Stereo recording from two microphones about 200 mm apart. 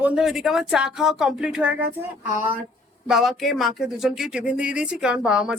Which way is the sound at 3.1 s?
Centre (ahead or behind).